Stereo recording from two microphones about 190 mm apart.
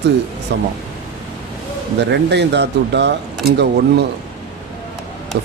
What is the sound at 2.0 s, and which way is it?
Speech, 65° right (ahead or behind).